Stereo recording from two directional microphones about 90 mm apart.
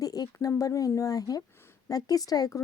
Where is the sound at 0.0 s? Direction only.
40° left (ahead or behind).